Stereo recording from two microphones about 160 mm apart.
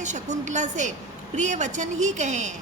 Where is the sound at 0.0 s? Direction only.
50° right (ahead or behind).